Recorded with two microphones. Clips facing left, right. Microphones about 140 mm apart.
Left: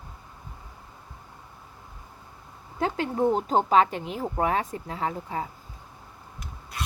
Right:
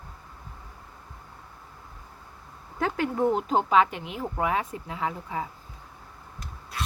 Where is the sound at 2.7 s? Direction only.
25° left (ahead or behind).